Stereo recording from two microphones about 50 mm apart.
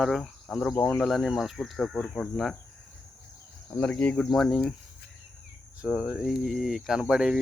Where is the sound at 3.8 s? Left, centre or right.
Left.